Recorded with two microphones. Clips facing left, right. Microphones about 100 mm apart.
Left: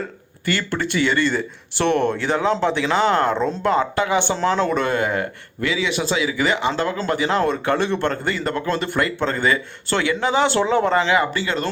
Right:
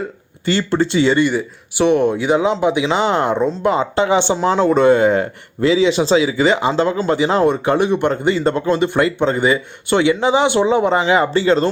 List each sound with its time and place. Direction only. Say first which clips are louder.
0.4 s speech: right 6 dB; 25° right (ahead or behind)
1.3 s speech: right 3 dB; 10° right (ahead or behind); by 11.7 s 30° right (ahead or behind)